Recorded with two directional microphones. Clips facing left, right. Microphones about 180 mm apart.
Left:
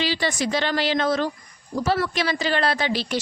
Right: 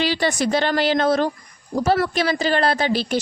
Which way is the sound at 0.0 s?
55° right (ahead or behind).